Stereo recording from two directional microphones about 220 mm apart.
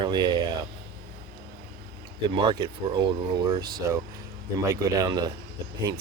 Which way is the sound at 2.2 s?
20° right (ahead or behind).